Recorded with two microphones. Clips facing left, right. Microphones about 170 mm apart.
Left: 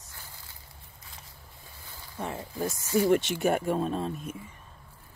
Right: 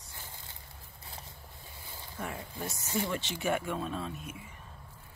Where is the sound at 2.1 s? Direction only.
25° left (ahead or behind).